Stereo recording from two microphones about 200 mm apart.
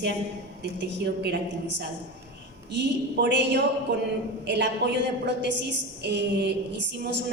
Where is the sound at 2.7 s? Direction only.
60° right (ahead or behind).